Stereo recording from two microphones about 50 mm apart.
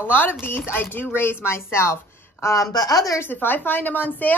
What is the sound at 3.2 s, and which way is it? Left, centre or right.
Speech, left.